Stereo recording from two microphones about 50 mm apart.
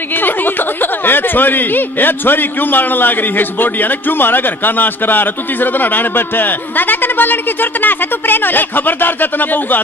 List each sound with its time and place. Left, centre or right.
0.1 s speech: left